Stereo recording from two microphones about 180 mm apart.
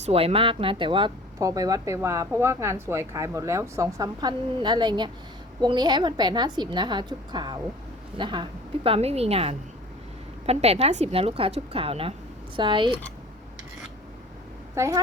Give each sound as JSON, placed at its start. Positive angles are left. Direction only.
{"t": 0.0, "sound": "a woman's voice", "side_deg": -35}
{"t": 14.8, "sound": "a woman's voice", "side_deg": -15}